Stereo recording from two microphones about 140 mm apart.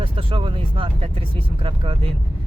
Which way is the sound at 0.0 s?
40° right (ahead or behind).